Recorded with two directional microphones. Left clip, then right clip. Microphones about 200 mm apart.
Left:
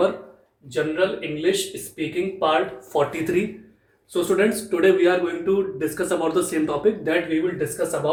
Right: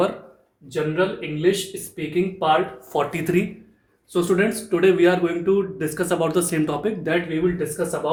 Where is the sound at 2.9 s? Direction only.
40° right (ahead or behind).